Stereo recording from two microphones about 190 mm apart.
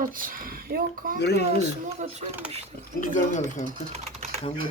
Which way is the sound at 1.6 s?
35° right (ahead or behind).